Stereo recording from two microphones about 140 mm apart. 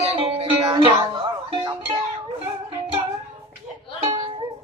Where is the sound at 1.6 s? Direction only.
35° right (ahead or behind).